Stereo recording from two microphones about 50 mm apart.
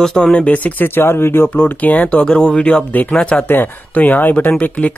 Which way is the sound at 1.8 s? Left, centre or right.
Left.